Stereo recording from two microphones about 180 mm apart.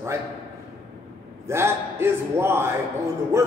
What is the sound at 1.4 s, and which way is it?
A man's voice, 15° right (ahead or behind).